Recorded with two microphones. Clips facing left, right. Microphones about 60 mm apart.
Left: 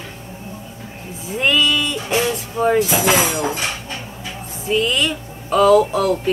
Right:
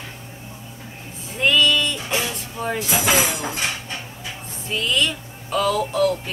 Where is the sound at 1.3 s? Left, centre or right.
Centre.